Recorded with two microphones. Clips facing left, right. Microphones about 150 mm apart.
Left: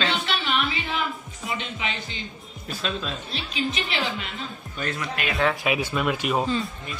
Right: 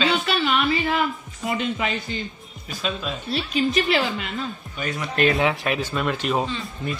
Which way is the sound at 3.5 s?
45° right (ahead or behind).